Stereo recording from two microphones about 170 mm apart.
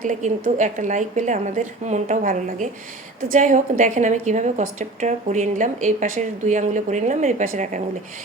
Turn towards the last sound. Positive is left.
turn(degrees=-45)  # may be behind; listen again after turning